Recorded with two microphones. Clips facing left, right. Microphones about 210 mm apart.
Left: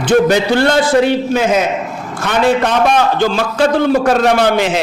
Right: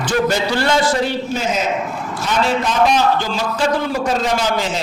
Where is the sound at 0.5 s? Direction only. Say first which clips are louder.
Left 5 dB; 55° left (ahead or behind).